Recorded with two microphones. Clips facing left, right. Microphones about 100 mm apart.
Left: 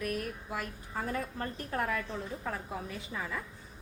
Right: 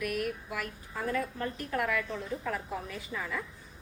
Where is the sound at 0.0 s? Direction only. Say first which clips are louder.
Right 3 dB; 30° left (ahead or behind).